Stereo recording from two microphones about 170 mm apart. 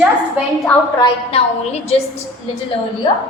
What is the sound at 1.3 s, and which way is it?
Speech, 35° left (ahead or behind).